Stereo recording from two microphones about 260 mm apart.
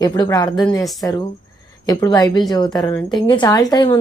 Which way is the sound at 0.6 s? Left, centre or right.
Centre.